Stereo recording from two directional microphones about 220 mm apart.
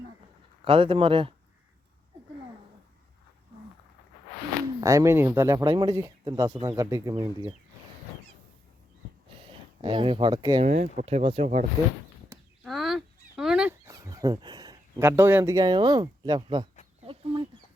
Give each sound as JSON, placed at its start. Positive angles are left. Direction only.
{"t": 0.6, "sound": "speech", "side_deg": -25}
{"t": 4.8, "sound": "speech", "side_deg": -15}
{"t": 9.8, "sound": "speech", "side_deg": -20}
{"t": 10.6, "sound": "speech", "side_deg": -30}
{"t": 12.3, "sound": "a sound", "side_deg": -15}
{"t": 12.6, "sound": "a sound", "side_deg": 0}
{"t": 17.0, "sound": "chicken", "side_deg": -25}